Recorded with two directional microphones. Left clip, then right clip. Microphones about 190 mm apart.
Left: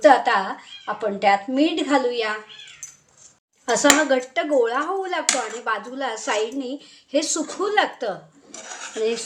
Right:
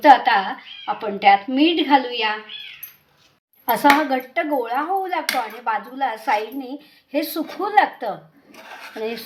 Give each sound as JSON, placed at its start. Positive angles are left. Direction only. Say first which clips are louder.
{"t": 0.0, "sound": "a woman's voice", "louder": "right 2 dB", "side_deg": 10}
{"t": 3.7, "sound": "a woman's voice", "louder": "right 1 dB", "side_deg": 15}